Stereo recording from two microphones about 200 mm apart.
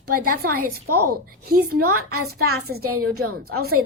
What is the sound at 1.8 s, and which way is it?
A woman's voice, 90° right.